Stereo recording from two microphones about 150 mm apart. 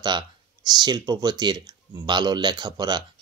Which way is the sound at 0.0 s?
30° right (ahead or behind).